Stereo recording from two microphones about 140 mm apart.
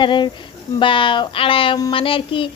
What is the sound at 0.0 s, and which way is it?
A woman's voice, 35° left (ahead or behind).